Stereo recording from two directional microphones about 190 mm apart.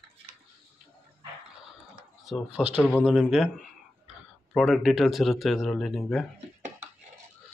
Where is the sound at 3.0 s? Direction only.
5° right (ahead or behind).